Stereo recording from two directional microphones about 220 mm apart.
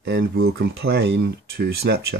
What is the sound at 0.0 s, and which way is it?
Speech, 50° right (ahead or behind).